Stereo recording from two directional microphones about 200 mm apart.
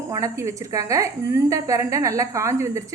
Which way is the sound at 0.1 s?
15° right (ahead or behind).